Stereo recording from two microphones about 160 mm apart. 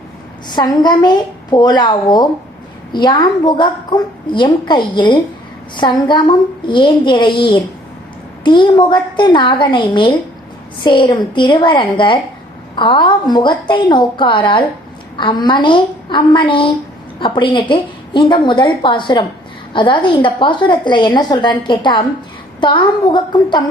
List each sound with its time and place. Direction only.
0.4 s a woman's voice: 25° left (ahead or behind)